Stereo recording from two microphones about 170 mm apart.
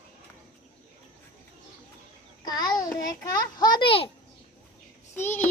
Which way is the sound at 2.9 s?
20° left (ahead or behind).